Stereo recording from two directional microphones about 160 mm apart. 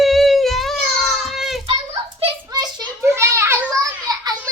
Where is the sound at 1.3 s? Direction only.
Centre (ahead or behind).